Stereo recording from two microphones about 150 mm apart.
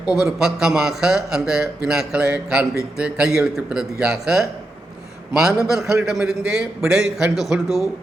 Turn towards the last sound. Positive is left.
turn(degrees=0)  # may be behind; listen again after turning